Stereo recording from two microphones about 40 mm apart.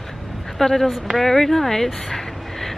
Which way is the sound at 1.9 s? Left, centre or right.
Centre.